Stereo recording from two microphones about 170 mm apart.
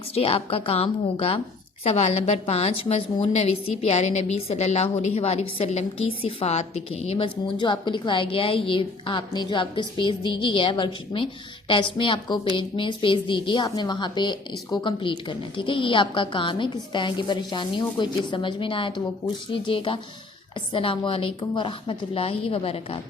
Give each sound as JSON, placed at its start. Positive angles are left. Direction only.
{"t": 0.1, "sound": "a woman's voice", "side_deg": 35}